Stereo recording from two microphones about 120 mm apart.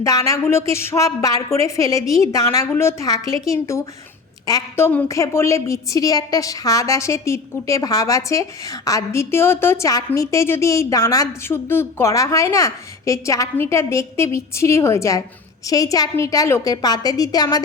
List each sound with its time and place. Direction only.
0.0 s a woman's voice: 25° left (ahead or behind)